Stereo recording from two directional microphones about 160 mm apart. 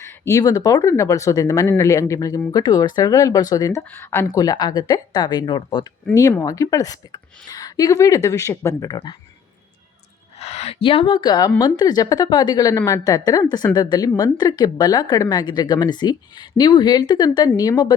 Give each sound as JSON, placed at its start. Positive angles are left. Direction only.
{"t": 0.0, "sound": "speech", "side_deg": 15}
{"t": 10.3, "sound": "speech", "side_deg": 40}